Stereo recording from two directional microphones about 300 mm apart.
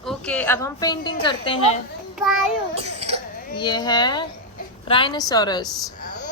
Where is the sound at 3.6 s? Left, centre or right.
Centre.